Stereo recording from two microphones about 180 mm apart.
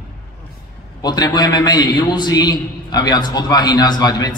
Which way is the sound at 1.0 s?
20° left (ahead or behind).